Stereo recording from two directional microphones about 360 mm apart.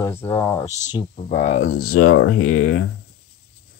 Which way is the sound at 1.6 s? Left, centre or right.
Left.